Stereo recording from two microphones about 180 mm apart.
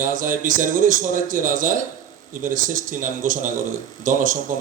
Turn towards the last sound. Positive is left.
turn(degrees=-50)  # may be behind; listen again after turning